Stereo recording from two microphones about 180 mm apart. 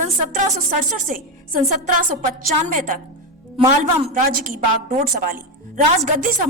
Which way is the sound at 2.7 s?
45° right (ahead or behind).